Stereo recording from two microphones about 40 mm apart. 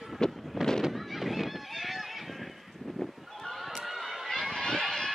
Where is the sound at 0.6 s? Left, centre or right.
Centre.